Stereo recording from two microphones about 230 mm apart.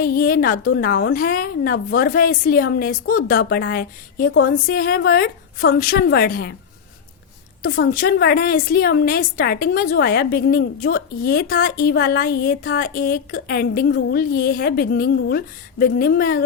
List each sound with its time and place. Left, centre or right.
0.0 s a woman's voice: left
7.9 s a woman's voice: left